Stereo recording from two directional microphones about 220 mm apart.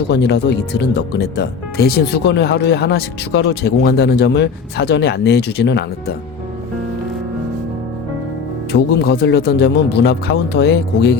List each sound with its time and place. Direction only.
0.1 s speech: 50° left (ahead or behind)
8.7 s speech: 50° left (ahead or behind)